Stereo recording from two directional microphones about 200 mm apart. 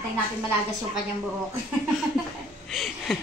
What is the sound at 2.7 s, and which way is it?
Speech, centre (ahead or behind).